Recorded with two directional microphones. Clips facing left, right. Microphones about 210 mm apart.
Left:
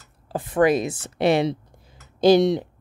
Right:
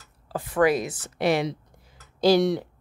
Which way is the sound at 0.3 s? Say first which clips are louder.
Left 3 dB; 20° left (ahead or behind).